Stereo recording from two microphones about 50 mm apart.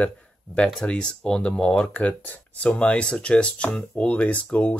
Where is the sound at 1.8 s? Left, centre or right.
Left.